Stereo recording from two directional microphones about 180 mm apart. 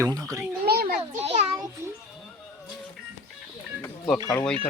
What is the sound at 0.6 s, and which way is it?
Children playing, 60° right (ahead or behind).